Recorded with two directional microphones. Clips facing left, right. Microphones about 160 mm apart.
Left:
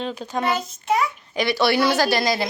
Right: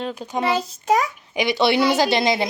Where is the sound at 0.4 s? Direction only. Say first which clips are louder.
Right 3 dB; 30° right (ahead or behind).